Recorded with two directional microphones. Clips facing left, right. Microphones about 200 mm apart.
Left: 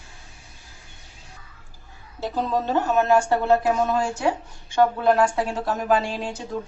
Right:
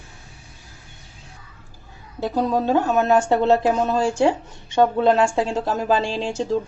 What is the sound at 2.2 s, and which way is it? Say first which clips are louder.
Speech: right 4 dB; 15° right (ahead or behind).